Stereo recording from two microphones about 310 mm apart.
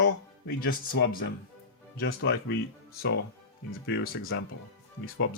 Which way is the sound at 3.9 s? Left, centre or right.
Left.